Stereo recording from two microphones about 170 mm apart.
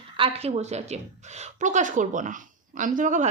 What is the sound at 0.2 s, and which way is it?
A woman's voice, 35° right (ahead or behind).